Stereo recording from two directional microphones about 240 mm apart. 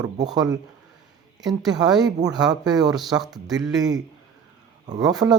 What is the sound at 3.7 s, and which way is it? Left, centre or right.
Speech, centre.